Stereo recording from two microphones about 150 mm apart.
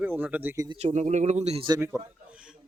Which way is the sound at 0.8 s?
50° right (ahead or behind).